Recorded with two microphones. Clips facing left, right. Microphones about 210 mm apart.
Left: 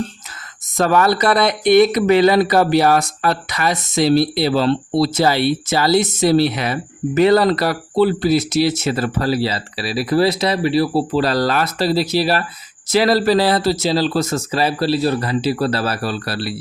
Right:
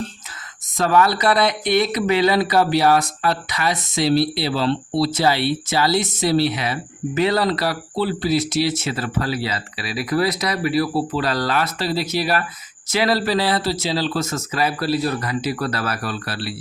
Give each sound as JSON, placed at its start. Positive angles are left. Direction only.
{"t": 0.8, "sound": "speech", "side_deg": 45}